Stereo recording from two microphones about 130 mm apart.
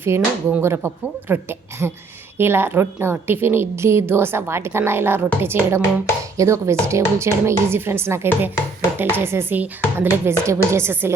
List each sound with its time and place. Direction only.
0.0 s a woman's voice: 20° right (ahead or behind)